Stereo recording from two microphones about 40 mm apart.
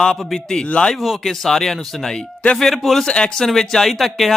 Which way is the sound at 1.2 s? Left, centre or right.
Centre.